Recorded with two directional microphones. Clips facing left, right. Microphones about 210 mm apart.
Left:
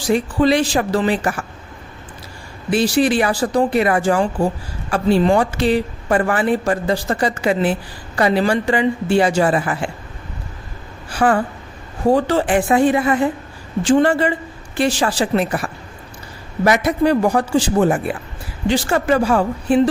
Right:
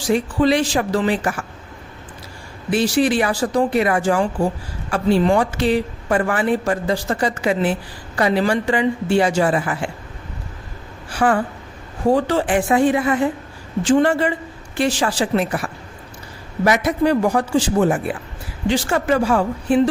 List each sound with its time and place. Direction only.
0.1 s a woman's voice: 35° left (ahead or behind)
2.6 s a woman's voice: 35° left (ahead or behind)
11.1 s a woman's voice: 35° left (ahead or behind)
16.7 s a woman's voice: 35° left (ahead or behind)